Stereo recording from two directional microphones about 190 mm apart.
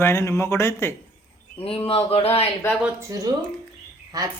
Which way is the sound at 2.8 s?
15° right (ahead or behind).